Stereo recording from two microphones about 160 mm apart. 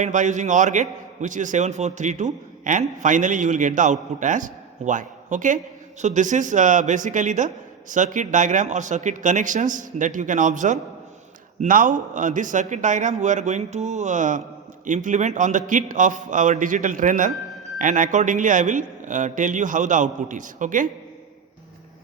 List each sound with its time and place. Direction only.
0.0 s a man's voice: 50° right (ahead or behind)